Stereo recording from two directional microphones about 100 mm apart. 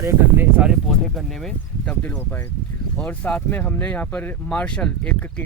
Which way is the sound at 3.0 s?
15° left (ahead or behind).